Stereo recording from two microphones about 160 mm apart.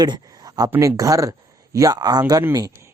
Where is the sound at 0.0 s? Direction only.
25° right (ahead or behind).